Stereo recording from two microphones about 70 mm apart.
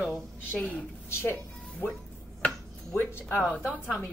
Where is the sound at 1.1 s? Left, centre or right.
Left.